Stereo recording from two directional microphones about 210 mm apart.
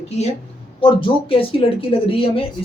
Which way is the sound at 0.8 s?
25° left (ahead or behind).